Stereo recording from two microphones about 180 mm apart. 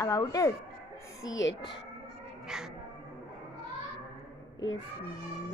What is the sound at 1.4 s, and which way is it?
Speech, 80° left.